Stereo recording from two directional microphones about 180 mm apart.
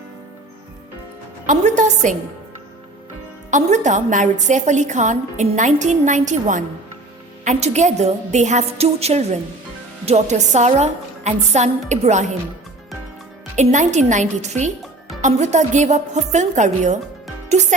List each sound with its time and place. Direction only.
1.5 s a woman's voice: 45° right (ahead or behind)
3.5 s a woman's voice: 45° right (ahead or behind)
13.6 s a woman's voice: 40° right (ahead or behind)